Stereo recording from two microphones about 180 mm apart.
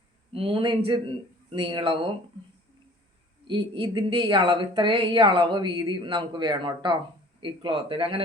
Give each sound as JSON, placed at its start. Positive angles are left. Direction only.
{"t": 0.3, "sound": "speech", "side_deg": -30}
{"t": 3.4, "sound": "speech", "side_deg": -25}